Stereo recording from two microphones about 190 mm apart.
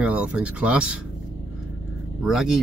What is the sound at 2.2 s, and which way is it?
Speech, centre (ahead or behind).